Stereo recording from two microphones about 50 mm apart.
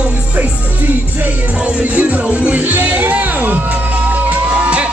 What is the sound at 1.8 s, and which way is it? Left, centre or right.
Music, right.